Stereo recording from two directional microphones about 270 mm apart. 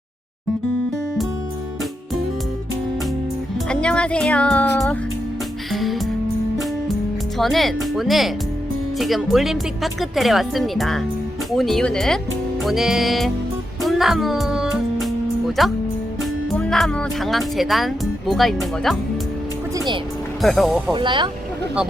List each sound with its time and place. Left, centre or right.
3.7 s speech: centre
5.7 s music: centre
7.3 s speech: centre
13.8 s music: centre
15.6 s speech: centre
20.4 s speech: centre
20.9 s speech: centre